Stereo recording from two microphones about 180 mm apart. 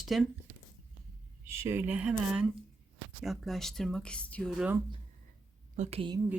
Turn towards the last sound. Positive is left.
turn(degrees=-30)  # may be behind; listen again after turning